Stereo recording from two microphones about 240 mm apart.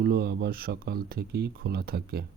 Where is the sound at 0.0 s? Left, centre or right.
Right.